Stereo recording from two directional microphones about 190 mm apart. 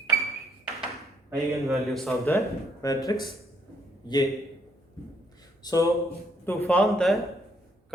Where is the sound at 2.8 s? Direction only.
20° left (ahead or behind).